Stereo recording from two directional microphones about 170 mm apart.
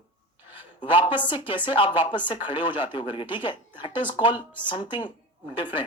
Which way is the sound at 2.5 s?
25° left (ahead or behind).